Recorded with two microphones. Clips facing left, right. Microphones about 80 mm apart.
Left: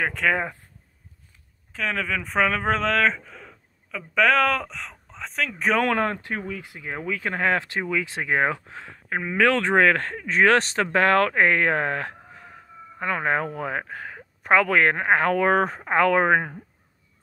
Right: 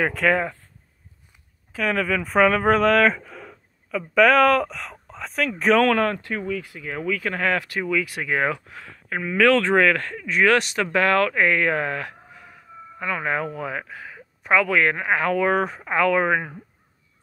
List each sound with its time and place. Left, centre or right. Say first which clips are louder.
0.0 s speech: right 3 dB; centre
1.7 s speech: right 4 dB; centre
5.8 s speech: right 4 dB; left